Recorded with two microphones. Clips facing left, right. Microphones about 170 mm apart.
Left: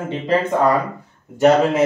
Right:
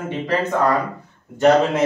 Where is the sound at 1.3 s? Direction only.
10° left (ahead or behind).